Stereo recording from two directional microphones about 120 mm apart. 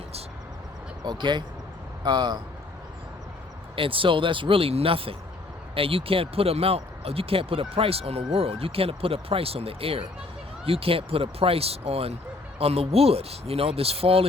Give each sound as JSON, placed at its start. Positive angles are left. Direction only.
{"t": 1.0, "sound": "speech", "side_deg": -40}
{"t": 3.8, "sound": "speech", "side_deg": -45}